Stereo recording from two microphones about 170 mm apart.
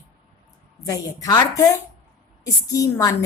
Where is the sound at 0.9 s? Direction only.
20° left (ahead or behind).